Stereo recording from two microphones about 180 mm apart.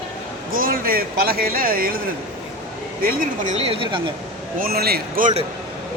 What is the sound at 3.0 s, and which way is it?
Speech, 55° right (ahead or behind).